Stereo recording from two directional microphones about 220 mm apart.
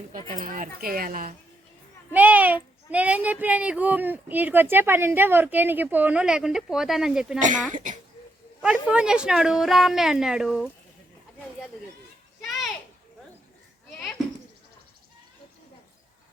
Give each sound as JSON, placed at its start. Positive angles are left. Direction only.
{"t": 0.3, "sound": "speech", "side_deg": -35}
{"t": 2.1, "sound": "speech", "side_deg": -5}
{"t": 7.3, "sound": "speech", "side_deg": -35}
{"t": 8.6, "sound": "a woman's voice", "side_deg": -5}